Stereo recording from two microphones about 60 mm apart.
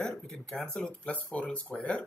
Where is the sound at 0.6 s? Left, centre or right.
Centre.